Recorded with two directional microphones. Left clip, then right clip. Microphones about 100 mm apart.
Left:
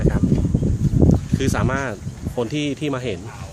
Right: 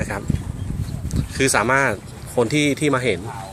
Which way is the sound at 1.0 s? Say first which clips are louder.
Right 1 dB; 15° left (ahead or behind).